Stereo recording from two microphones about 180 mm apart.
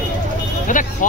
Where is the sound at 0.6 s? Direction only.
45° left (ahead or behind).